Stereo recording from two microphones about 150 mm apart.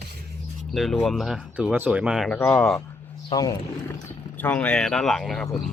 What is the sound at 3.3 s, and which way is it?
Speech, 25° left (ahead or behind).